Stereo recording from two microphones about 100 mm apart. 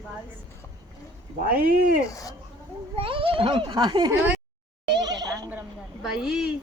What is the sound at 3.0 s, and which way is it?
A child's voice, 65° right (ahead or behind).